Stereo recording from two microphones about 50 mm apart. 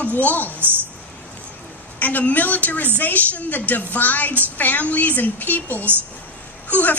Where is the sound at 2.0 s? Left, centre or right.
Left.